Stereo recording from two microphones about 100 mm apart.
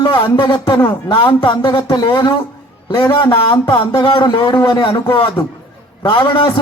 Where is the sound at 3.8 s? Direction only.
60° left (ahead or behind).